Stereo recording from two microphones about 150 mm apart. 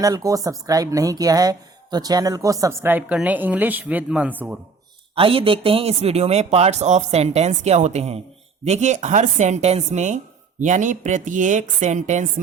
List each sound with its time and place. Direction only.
0.0 s speech: 25° right (ahead or behind)
5.1 s speech: 35° right (ahead or behind); by 12.3 s 55° right (ahead or behind)